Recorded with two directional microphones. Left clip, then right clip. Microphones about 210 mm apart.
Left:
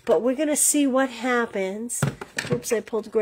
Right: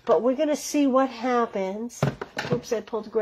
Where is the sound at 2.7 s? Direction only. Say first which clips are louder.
Left 3 dB; 40° left (ahead or behind).